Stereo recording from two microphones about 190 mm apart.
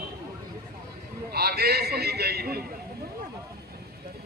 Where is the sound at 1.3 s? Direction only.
55° right (ahead or behind).